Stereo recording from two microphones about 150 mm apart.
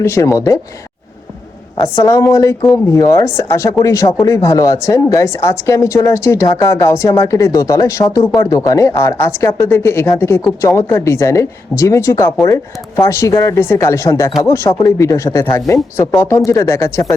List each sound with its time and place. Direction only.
0.0 s speech: 20° left (ahead or behind)
2.3 s speech: 20° left (ahead or behind)